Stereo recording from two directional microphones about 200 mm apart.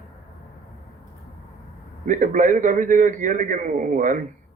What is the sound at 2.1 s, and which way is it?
A man's voice, 40° right (ahead or behind).